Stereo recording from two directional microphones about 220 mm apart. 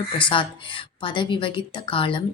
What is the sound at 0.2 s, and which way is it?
A woman's voice, 25° left (ahead or behind).